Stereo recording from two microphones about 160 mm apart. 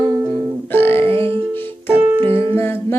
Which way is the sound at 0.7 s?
15° left (ahead or behind).